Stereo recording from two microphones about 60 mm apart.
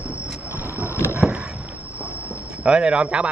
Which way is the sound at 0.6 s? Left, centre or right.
Right.